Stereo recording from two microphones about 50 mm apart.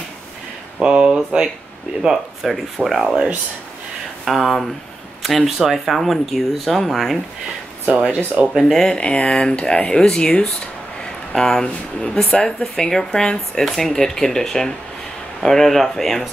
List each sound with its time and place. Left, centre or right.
0.8 s speech: centre
2.4 s speech: centre
4.2 s speech: centre
7.9 s speech: right
8.5 s speech: centre